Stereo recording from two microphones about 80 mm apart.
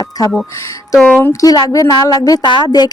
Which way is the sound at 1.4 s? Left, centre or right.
Left.